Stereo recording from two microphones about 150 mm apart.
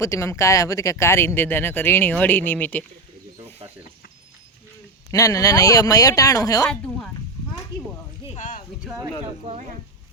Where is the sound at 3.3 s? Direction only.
40° right (ahead or behind).